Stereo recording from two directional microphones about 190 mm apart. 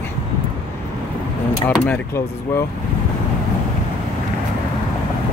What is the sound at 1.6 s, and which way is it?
Speech, 10° left (ahead or behind).